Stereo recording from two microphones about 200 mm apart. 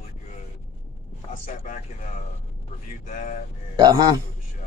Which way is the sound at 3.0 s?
35° left (ahead or behind).